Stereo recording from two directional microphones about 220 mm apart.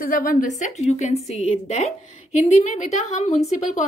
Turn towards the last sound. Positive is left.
turn(degrees=30)  # may be behind; listen again after turning